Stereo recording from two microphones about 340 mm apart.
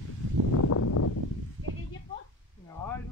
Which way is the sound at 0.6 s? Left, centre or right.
Left.